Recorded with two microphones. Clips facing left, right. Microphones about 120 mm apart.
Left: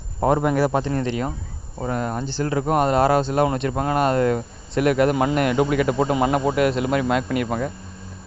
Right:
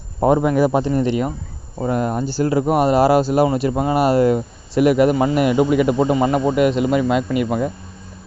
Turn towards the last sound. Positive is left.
turn(degrees=-10)  # may be behind; listen again after turning